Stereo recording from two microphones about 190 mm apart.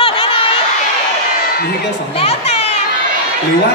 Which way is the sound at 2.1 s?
30° left (ahead or behind).